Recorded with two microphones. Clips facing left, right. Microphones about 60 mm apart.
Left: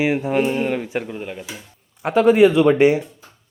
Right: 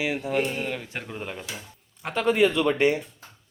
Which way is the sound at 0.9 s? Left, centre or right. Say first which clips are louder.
Left 8 dB; centre.